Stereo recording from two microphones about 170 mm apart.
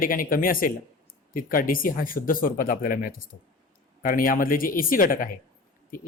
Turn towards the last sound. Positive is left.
turn(degrees=55)  # may be behind; listen again after turning